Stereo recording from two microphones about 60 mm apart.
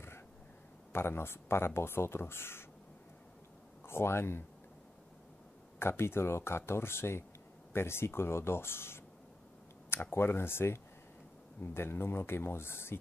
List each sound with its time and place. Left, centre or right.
0.9 s speech: left
3.8 s speech: left
5.8 s speech: left
10.1 s speech: left